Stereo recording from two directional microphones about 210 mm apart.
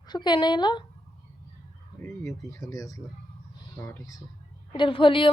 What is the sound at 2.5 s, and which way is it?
Speech, 15° left (ahead or behind).